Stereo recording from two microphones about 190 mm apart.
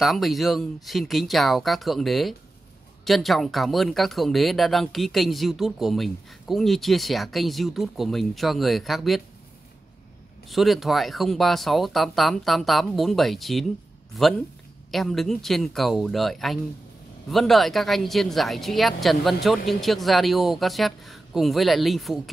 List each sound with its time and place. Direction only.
0.0 s speech: centre (ahead or behind)
10.5 s speech: centre (ahead or behind)
14.9 s speech: centre (ahead or behind)